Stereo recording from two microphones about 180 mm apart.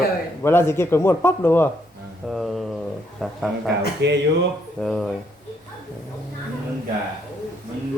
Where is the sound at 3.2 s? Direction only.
Centre (ahead or behind).